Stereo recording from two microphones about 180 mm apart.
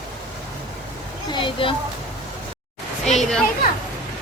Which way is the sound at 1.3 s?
30° left (ahead or behind).